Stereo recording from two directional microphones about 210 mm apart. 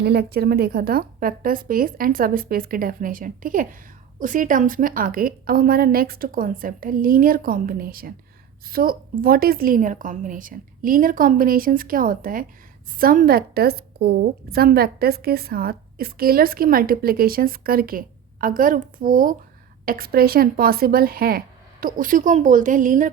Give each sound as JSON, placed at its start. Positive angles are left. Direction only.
{"t": 0.0, "sound": "a woman's voice", "side_deg": -50}